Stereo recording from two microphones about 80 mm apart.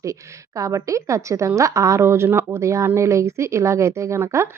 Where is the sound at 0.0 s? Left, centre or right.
Right.